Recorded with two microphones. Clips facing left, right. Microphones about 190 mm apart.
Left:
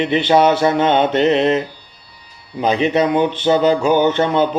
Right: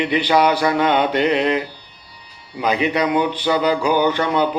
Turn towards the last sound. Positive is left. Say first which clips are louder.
# left 3 dB
turn(degrees=25)  # may be behind; listen again after turning